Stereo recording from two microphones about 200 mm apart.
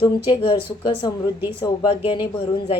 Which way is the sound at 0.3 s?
20° left (ahead or behind).